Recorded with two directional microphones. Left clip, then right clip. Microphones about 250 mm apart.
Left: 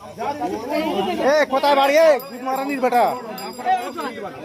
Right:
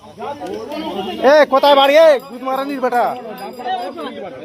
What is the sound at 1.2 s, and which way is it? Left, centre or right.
A man's voice, right.